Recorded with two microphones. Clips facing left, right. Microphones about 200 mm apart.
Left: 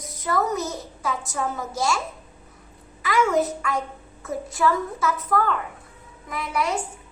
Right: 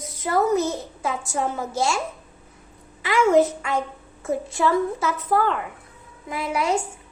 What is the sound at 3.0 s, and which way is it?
A woman's voice, 25° right (ahead or behind).